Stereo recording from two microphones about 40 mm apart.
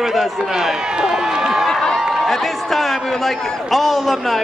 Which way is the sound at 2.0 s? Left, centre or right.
Centre.